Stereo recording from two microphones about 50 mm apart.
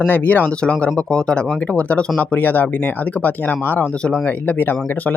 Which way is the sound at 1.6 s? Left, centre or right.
Left.